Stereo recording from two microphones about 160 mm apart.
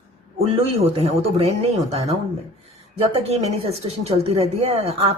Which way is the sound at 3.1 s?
40° right (ahead or behind).